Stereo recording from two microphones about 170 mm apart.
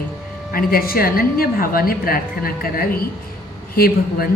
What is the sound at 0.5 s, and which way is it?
A woman's voice, 60° left (ahead or behind).